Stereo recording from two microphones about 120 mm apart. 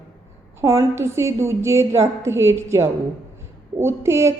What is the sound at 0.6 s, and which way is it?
A woman's voice, 25° right (ahead or behind).